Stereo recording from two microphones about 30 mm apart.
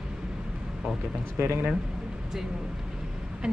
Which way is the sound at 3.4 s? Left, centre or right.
Right.